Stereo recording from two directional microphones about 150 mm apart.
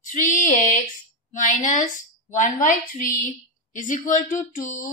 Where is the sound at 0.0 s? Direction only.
60° left (ahead or behind).